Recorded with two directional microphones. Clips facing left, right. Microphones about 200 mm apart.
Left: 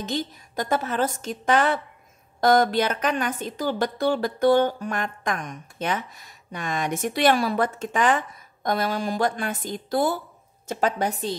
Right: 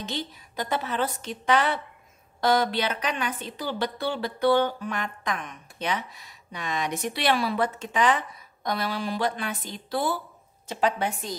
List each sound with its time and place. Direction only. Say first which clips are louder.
0.0 s a woman's voice: left 5 dB; 45° left (ahead or behind)